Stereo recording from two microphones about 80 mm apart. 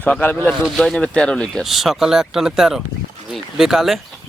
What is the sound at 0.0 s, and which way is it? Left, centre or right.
Speech, centre.